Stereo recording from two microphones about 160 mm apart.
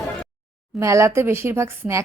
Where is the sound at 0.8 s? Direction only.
20° right (ahead or behind).